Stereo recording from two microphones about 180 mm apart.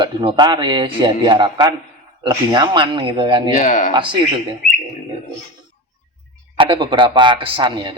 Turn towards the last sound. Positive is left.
turn(degrees=-25)  # may be behind; listen again after turning